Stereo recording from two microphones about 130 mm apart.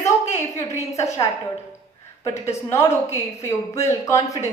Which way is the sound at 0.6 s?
25° left (ahead or behind).